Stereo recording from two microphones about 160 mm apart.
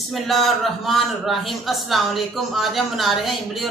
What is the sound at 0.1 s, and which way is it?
A man's voice, centre (ahead or behind).